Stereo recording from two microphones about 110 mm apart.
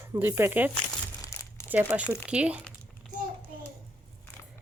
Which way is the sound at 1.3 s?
25° left (ahead or behind).